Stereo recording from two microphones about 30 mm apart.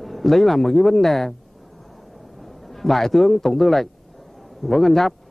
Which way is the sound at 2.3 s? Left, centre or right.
Centre.